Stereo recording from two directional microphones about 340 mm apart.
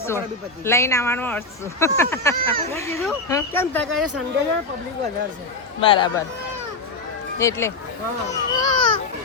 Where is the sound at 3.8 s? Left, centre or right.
Right.